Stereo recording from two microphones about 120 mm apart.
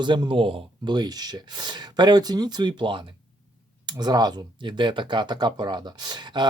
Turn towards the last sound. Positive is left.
turn(degrees=-40)  # may be behind; listen again after turning